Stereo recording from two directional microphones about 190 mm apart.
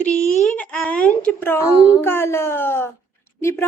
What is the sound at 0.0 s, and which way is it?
A child's voice, 5° left (ahead or behind).